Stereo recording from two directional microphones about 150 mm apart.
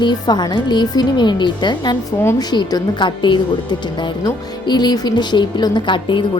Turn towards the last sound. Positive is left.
turn(degrees=35)  # may be behind; listen again after turning